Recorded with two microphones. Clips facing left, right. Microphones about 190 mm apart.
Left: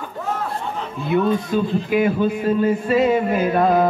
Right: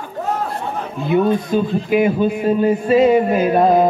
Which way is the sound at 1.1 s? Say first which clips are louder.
Right 3 dB; 20° right (ahead or behind).